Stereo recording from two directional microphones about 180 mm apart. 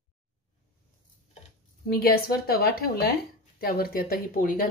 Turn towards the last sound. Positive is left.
turn(degrees=50)  # may be behind; listen again after turning